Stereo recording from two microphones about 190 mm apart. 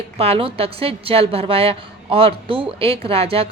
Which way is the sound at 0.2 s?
30° right (ahead or behind).